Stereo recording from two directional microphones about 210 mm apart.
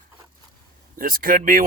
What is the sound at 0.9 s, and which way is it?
Speech, 45° right (ahead or behind).